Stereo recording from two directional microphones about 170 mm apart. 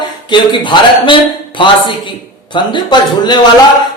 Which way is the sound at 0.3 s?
25° left (ahead or behind).